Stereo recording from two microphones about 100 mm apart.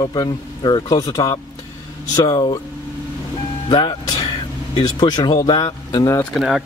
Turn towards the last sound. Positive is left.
turn(degrees=-5)  # may be behind; listen again after turning